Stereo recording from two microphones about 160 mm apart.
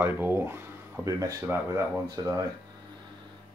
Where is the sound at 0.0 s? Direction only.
10° right (ahead or behind).